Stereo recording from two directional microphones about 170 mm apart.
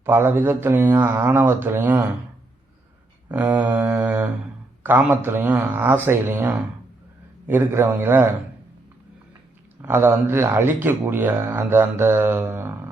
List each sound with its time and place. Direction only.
0.0 s speech: 15° right (ahead or behind)
3.2 s speech: 10° right (ahead or behind)
9.8 s speech: 15° right (ahead or behind)